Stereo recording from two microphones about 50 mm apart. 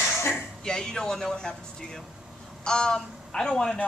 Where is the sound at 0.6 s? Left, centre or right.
Centre.